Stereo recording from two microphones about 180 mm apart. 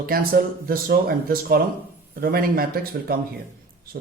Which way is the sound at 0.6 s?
55° right (ahead or behind).